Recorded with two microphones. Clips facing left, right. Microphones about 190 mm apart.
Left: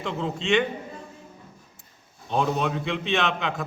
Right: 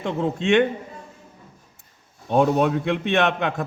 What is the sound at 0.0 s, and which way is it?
Speech, 55° right (ahead or behind).